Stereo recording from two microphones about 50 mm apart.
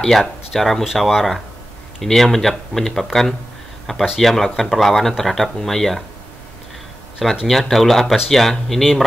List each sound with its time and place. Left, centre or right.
0.2 s speech: centre
7.2 s speech: centre